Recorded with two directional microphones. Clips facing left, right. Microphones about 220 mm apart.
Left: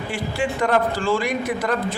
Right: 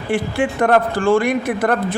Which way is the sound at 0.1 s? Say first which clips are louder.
Right 7 dB; 55° right (ahead or behind).